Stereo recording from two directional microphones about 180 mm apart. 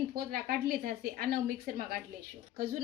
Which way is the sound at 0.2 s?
55° right (ahead or behind).